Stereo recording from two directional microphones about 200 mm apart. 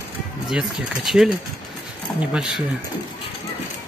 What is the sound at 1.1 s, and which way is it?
Speech, centre (ahead or behind).